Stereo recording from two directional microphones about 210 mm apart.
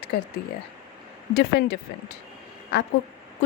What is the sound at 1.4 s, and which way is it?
Speech, 50° left (ahead or behind).